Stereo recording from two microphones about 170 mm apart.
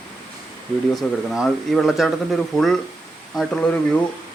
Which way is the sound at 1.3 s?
Centre (ahead or behind).